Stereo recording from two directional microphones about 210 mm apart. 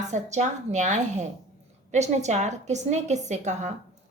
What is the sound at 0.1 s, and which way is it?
A woman's voice, 35° right (ahead or behind).